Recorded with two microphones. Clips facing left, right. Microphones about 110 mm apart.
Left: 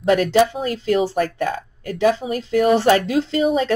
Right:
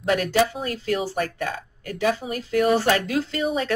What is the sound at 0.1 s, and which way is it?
Speech, 40° left (ahead or behind).